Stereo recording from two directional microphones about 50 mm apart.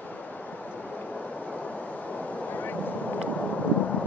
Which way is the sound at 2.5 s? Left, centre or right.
Left.